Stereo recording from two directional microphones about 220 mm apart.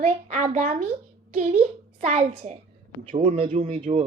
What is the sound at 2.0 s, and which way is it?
A woman's voice, 30° right (ahead or behind).